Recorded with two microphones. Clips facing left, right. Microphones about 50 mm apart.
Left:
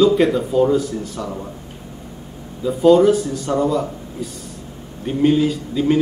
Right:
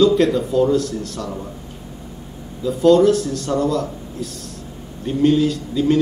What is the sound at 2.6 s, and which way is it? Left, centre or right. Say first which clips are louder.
Speech: left 1 dB; centre.